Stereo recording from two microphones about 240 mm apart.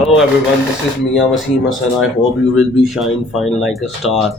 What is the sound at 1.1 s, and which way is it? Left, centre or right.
Speech, centre.